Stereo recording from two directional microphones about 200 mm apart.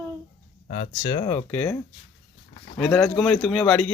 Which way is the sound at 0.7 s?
35° left (ahead or behind).